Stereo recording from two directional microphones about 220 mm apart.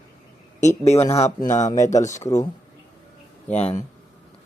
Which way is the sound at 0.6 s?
30° left (ahead or behind).